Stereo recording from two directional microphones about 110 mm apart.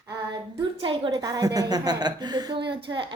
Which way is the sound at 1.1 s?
35° right (ahead or behind).